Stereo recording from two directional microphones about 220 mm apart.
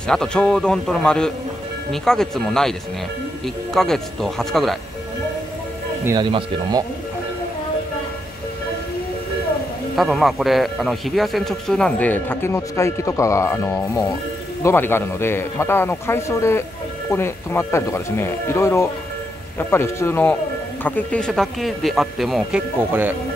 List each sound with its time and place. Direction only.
0.0 s speech: 5° left (ahead or behind)
6.0 s speech: 20° right (ahead or behind)
9.9 s a man's voice: centre (ahead or behind)